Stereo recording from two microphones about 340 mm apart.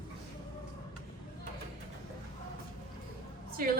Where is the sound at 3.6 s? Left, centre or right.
Right.